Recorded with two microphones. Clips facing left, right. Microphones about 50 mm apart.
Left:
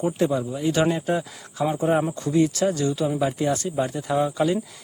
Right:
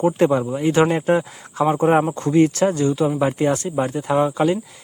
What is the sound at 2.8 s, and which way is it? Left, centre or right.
Speech, right.